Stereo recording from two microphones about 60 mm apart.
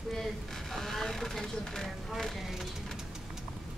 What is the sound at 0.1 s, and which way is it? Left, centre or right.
Speech, centre.